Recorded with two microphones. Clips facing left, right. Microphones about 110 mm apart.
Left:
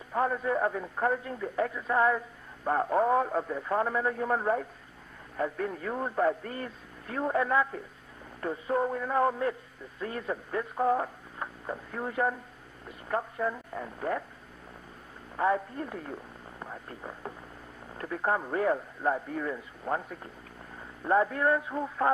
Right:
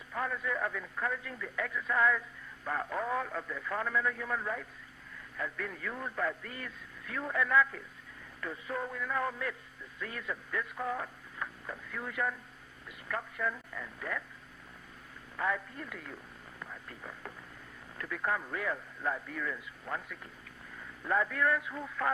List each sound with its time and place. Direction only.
0.1 s a man's voice: 35° left (ahead or behind)
15.4 s a man's voice: 35° left (ahead or behind)